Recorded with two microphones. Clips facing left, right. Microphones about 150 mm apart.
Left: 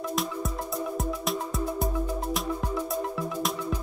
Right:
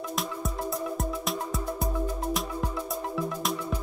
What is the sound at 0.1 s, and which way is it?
Music, centre (ahead or behind).